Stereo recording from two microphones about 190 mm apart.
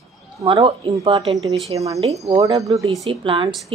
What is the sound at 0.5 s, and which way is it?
A woman's voice, 30° right (ahead or behind).